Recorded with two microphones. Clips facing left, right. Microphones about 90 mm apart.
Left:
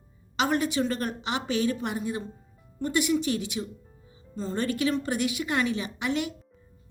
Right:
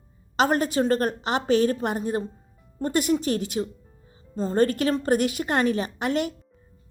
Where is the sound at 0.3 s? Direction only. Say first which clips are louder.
Right 4 dB; 45° right (ahead or behind).